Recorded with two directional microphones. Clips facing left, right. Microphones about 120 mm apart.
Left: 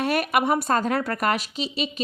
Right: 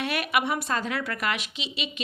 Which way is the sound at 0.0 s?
40° left (ahead or behind).